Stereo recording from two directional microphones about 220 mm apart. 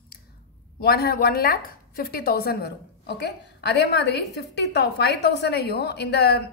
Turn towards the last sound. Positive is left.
turn(degrees=50)  # may be behind; listen again after turning